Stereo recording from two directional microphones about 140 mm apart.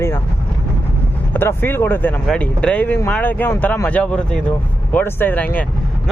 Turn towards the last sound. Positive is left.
turn(degrees=10)  # may be behind; listen again after turning